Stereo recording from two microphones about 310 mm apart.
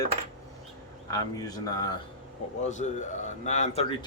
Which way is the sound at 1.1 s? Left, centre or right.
Centre.